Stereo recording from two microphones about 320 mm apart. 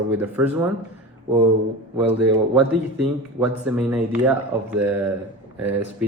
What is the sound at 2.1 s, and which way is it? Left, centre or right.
A man's voice, centre.